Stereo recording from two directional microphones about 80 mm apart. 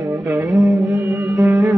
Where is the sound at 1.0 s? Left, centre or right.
Right.